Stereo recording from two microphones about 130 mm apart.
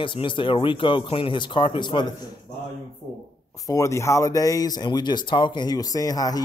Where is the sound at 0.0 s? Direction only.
40° left (ahead or behind).